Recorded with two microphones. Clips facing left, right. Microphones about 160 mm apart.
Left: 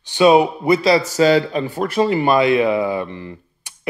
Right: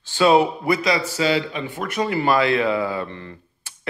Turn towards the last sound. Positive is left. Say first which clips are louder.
# left 5 dB
turn(degrees=15)  # may be behind; listen again after turning